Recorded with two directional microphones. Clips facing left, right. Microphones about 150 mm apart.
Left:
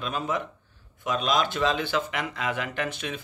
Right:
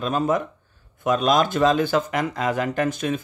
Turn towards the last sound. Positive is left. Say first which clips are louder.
# right 8 dB
turn(degrees=-45)  # may be behind; listen again after turning